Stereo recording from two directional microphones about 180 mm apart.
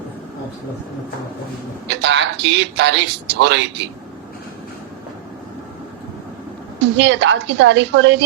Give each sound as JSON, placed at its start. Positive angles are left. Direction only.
{"t": 1.9, "sound": "a man's voice", "side_deg": -80}
{"t": 6.9, "sound": "a man's voice", "side_deg": -85}